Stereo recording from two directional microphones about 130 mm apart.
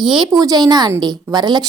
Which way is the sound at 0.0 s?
35° right (ahead or behind).